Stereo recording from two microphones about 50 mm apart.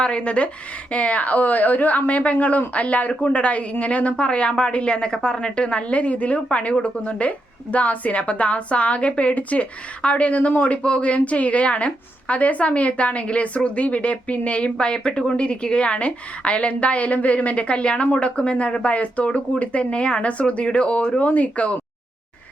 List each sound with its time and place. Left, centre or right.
0.0 s a woman's voice: left